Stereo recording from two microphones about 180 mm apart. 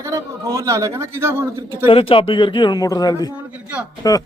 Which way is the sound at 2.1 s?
25° left (ahead or behind).